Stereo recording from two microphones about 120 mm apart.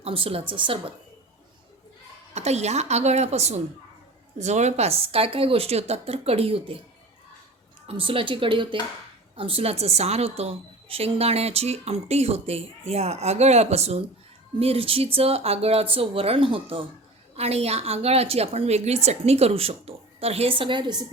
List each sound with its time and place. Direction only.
0.0 s speech: 50° right (ahead or behind)
2.3 s a woman's voice: 65° right (ahead or behind)
7.9 s a woman's voice: 50° right (ahead or behind)
17.3 s a woman's voice: 60° right (ahead or behind); by 20.9 s 40° right (ahead or behind)